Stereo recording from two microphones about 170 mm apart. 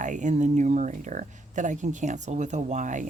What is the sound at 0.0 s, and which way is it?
Speech, 45° right (ahead or behind).